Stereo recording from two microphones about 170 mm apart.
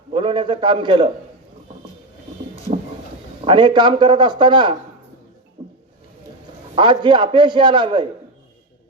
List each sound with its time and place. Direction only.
0.1 s a man's voice: 30° right (ahead or behind)
3.4 s a man's voice: 30° right (ahead or behind)
5.6 s a sound: 40° right (ahead or behind)
6.7 s a man's voice: 30° right (ahead or behind)